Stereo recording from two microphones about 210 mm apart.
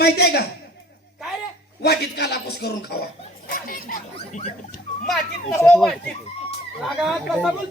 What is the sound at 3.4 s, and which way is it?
Dog, 40° left (ahead or behind).